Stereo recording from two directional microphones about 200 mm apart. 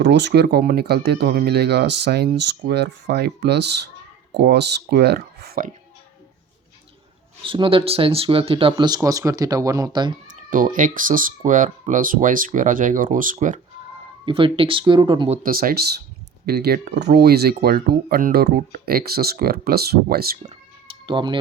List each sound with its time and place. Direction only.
0.0 s speech: 60° right (ahead or behind)
7.4 s speech: 25° right (ahead or behind)
10.2 s speech: 40° right (ahead or behind)
14.3 s speech: 25° right (ahead or behind)
15.4 s speech: 45° right (ahead or behind)
20.5 s a sound: 25° right (ahead or behind)